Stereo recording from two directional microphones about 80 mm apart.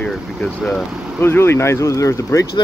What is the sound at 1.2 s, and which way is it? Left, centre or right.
Speech, left.